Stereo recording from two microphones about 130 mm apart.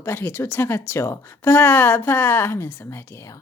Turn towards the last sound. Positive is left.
turn(degrees=20)  # may be behind; listen again after turning